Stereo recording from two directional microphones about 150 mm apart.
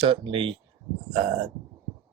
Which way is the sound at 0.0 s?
35° right (ahead or behind).